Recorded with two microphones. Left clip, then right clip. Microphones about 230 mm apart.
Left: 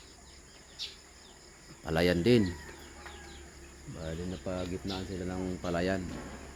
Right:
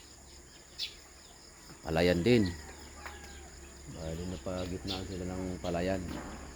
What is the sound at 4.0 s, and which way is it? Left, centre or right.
Speech, centre.